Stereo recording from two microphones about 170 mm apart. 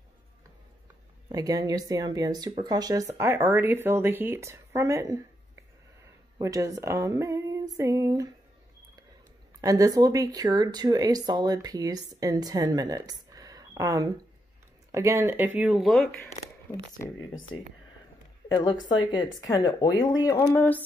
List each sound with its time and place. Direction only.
1.3 s speech: 20° right (ahead or behind)
6.3 s speech: 20° right (ahead or behind)
9.6 s speech: 20° right (ahead or behind); by 16.1 s centre (ahead or behind)
16.2 s speech: 15° left (ahead or behind)
18.5 s speech: 25° left (ahead or behind)